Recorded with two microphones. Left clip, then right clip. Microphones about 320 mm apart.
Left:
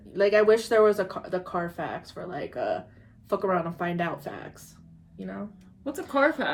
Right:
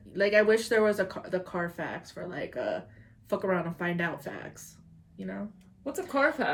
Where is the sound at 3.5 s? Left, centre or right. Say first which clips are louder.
Left 3 dB; centre.